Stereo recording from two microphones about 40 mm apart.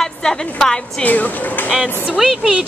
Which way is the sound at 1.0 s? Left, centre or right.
Left.